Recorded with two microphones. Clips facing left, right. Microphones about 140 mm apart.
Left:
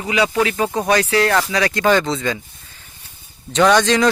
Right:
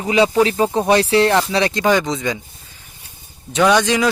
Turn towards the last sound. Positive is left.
turn(degrees=-10)  # may be behind; listen again after turning